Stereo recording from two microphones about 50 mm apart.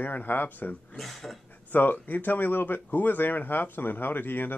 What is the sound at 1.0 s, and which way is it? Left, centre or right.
Speech, centre.